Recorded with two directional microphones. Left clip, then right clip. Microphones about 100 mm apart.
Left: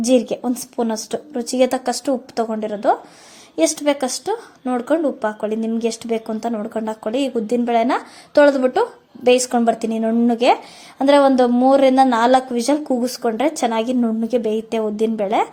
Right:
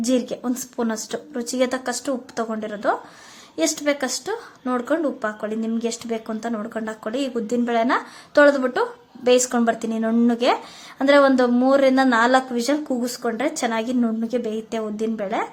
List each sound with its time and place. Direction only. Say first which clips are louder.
0.0 s a woman's voice: left 6 dB; 30° left (ahead or behind)